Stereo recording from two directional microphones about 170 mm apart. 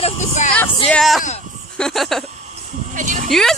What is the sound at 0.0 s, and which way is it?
Vehicle, 45° left (ahead or behind).